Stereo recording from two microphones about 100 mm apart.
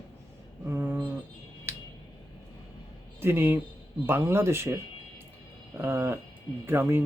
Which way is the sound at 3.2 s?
25° right (ahead or behind).